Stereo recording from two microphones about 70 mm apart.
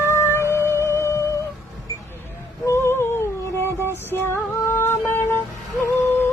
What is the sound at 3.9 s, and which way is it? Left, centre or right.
Music, left.